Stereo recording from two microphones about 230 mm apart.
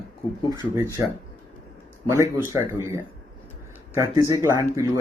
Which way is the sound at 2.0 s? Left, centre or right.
Centre.